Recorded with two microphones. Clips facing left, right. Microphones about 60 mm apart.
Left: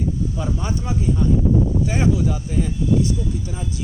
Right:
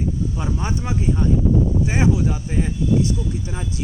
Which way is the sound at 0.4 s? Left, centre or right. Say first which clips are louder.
Even; right.